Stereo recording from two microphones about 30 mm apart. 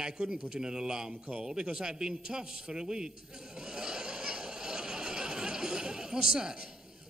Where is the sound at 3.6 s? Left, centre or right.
Right.